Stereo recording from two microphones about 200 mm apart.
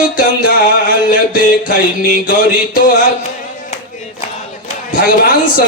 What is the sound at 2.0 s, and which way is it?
Speech, 45° left (ahead or behind).